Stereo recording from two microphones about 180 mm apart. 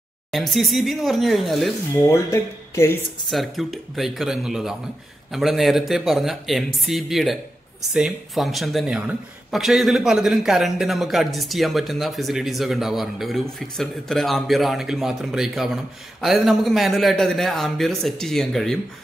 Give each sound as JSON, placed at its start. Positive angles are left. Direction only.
{"t": 0.3, "sound": "speech", "side_deg": 0}
{"t": 2.0, "sound": "speech", "side_deg": 15}
{"t": 3.3, "sound": "speech", "side_deg": 0}